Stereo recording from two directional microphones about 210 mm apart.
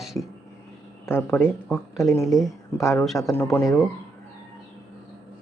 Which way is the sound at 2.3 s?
Centre (ahead or behind).